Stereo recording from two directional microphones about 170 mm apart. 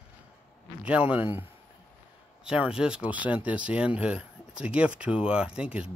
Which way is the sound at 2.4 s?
5° right (ahead or behind).